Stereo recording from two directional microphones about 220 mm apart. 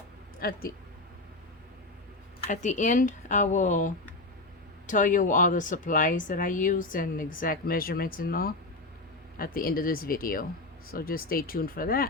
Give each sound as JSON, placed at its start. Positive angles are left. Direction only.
{"t": 0.3, "sound": "speech", "side_deg": 40}
{"t": 2.5, "sound": "speech", "side_deg": 35}